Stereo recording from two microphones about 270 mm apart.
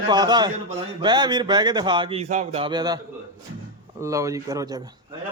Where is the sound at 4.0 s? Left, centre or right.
Centre.